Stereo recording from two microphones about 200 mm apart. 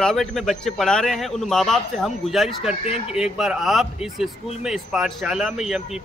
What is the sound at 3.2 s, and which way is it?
A man's voice, 5° right (ahead or behind).